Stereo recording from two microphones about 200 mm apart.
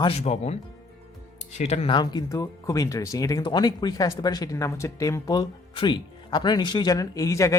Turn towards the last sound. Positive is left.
turn(degrees=15)  # may be behind; listen again after turning